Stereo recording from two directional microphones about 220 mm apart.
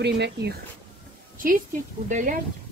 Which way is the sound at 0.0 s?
50° right (ahead or behind).